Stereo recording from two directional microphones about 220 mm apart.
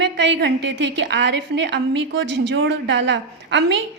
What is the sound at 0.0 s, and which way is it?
A woman's voice, 50° right (ahead or behind).